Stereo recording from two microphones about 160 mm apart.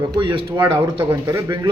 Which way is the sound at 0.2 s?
30° right (ahead or behind).